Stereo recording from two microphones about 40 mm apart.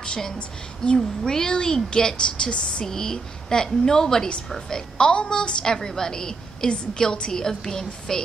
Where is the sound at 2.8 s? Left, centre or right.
Centre.